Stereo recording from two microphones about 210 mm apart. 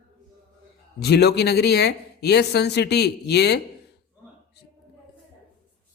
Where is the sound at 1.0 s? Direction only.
50° left (ahead or behind).